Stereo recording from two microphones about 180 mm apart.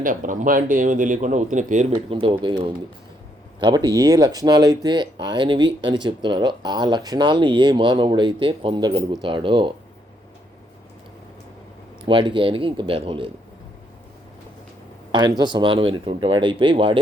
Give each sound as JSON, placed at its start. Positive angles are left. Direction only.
{"t": 0.0, "sound": "speech", "side_deg": -45}
{"t": 2.0, "sound": "speech", "side_deg": -30}
{"t": 12.0, "sound": "speech", "side_deg": -25}
{"t": 15.1, "sound": "speech", "side_deg": -25}